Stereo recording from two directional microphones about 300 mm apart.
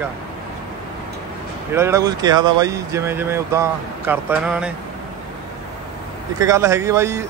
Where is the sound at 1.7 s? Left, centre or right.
Centre.